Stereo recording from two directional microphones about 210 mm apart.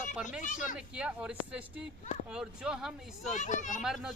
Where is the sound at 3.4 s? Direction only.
35° left (ahead or behind).